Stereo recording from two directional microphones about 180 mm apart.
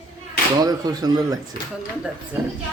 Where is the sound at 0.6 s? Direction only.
20° right (ahead or behind).